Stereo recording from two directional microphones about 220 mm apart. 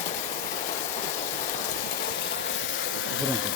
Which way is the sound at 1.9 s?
55° left (ahead or behind).